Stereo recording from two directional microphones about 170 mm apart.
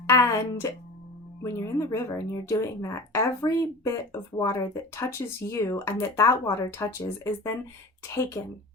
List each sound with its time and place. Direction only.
0.1 s speech: 15° left (ahead or behind)